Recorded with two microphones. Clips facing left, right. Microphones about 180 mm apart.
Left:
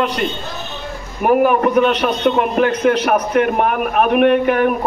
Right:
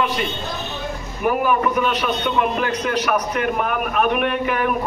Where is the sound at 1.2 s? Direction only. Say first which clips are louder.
Left 6 dB; 55° left (ahead or behind).